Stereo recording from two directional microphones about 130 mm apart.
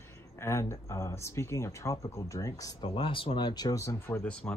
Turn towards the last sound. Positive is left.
turn(degrees=10)  # may be behind; listen again after turning